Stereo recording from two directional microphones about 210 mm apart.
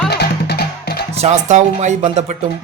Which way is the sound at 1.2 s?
35° right (ahead or behind).